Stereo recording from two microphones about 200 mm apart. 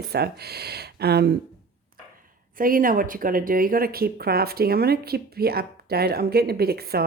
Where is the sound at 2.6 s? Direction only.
45° right (ahead or behind).